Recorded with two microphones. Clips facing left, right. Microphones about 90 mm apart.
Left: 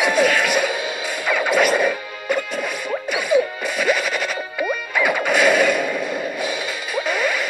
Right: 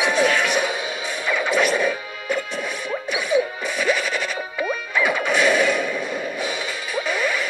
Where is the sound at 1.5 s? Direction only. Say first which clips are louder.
Left 3 dB; 50° left (ahead or behind).